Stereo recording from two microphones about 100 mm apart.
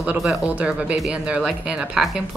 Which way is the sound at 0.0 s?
10° right (ahead or behind).